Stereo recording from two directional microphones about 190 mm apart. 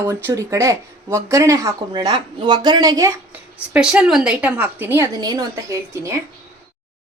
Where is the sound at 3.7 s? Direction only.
5° right (ahead or behind).